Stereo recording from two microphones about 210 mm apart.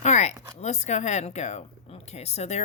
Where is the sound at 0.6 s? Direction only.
35° left (ahead or behind).